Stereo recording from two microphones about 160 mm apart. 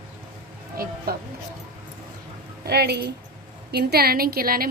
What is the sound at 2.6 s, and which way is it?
A woman's voice, 80° right.